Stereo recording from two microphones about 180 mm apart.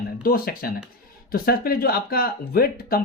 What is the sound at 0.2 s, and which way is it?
Speech, 55° left (ahead or behind).